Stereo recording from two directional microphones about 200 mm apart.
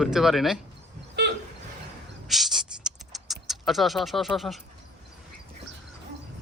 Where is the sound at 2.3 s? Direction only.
Centre (ahead or behind).